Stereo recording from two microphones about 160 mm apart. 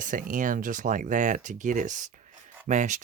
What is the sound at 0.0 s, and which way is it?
Speech, 55° right (ahead or behind).